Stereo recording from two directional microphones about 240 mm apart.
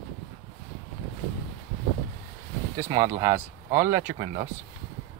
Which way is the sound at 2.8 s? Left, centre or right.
Centre.